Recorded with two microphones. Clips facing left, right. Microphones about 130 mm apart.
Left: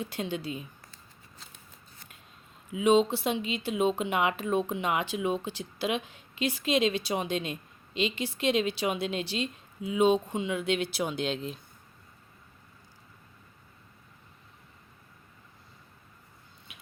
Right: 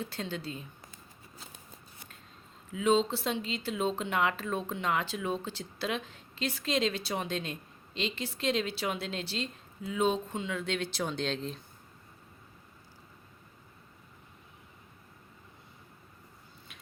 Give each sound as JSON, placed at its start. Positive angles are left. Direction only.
{"t": 0.0, "sound": "speech", "side_deg": 15}
{"t": 2.7, "sound": "speech", "side_deg": 15}